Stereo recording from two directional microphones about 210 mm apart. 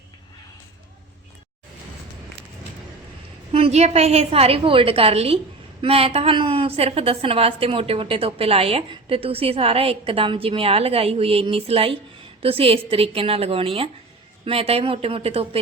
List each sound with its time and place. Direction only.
3.5 s a woman's voice: 30° right (ahead or behind)